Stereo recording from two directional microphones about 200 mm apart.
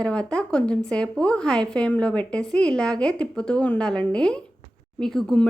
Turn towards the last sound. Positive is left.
turn(degrees=5)  # may be behind; listen again after turning